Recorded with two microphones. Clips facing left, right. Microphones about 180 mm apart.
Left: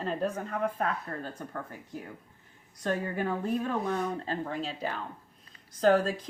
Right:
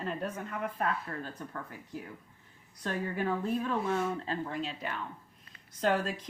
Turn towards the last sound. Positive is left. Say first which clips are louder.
# left 6 dB
turn(degrees=35)  # may be behind; listen again after turning